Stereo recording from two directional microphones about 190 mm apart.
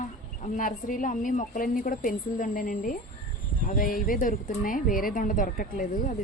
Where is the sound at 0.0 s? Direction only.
40° left (ahead or behind).